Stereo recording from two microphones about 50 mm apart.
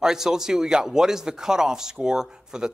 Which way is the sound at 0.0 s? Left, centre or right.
Centre.